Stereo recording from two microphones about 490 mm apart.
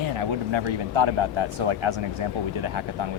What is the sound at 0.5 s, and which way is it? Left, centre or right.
Speech, right.